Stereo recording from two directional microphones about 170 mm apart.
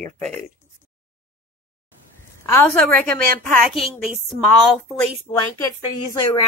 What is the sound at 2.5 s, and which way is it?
Speech, 10° left (ahead or behind).